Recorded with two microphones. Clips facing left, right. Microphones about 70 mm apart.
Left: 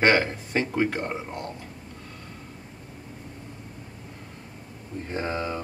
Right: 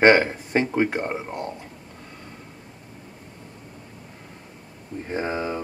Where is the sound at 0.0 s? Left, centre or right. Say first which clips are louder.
Right 5 dB; right.